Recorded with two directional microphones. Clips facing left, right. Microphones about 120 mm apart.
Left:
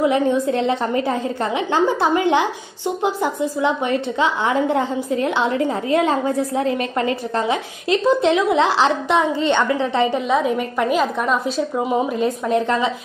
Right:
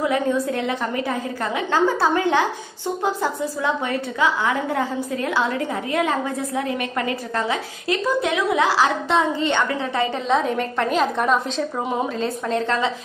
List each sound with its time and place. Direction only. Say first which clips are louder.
0.0 s a woman's voice: left 4 dB; 20° left (ahead or behind)
10.3 s a woman's voice: left 2 dB; 5° left (ahead or behind)
12.2 s a woman's voice: left 4 dB; 15° left (ahead or behind)